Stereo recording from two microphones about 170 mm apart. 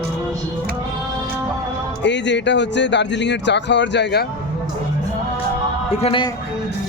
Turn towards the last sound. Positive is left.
turn(degrees=30)  # may be behind; listen again after turning